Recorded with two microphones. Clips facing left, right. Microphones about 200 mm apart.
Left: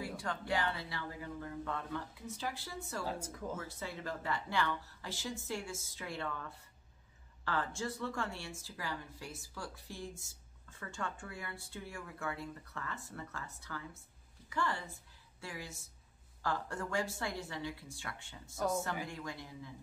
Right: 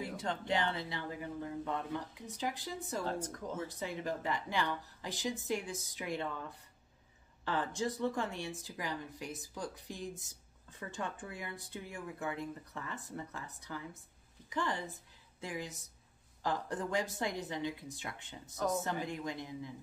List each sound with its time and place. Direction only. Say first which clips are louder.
0.0 s speech: right 2 dB; 20° right (ahead or behind)
3.1 s speech: right 2 dB; 5° left (ahead or behind)
3.5 s speech: right 4 dB; 15° right (ahead or behind)